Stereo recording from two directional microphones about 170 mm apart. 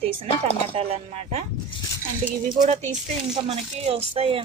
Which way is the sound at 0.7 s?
35° right (ahead or behind).